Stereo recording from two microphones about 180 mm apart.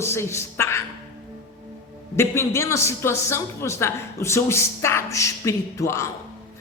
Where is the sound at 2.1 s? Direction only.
15° left (ahead or behind).